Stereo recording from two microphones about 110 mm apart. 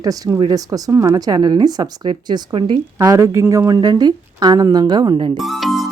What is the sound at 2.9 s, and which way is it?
Speech, 25° right (ahead or behind).